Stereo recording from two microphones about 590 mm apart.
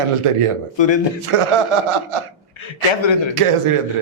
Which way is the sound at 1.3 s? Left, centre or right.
Right.